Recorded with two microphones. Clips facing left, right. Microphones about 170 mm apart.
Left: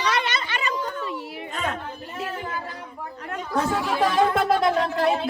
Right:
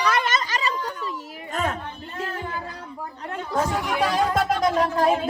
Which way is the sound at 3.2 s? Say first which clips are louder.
Right 1 dB; 30° right (ahead or behind).